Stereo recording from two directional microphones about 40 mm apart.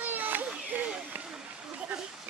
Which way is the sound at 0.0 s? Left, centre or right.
Right.